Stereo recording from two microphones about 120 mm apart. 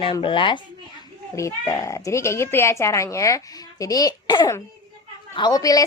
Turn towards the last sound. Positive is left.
turn(degrees=30)  # may be behind; listen again after turning